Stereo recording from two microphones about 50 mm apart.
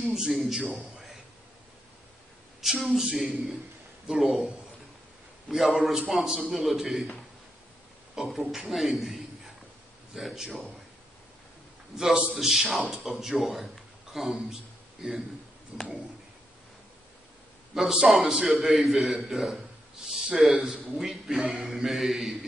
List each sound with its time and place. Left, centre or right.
0.0 s a man's voice: centre
2.6 s a man's voice: centre
5.5 s a man's voice: centre
8.1 s a man's voice: centre
11.9 s a man's voice: centre
15.7 s a sound: right
17.7 s a man's voice: centre